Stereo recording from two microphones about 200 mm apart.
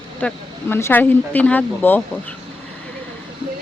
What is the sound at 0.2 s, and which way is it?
Speech, 10° left (ahead or behind).